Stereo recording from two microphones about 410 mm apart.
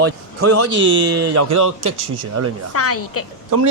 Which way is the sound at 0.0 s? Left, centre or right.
Right.